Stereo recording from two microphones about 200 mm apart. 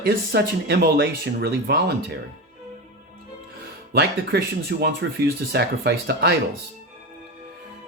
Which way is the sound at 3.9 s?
55° right (ahead or behind).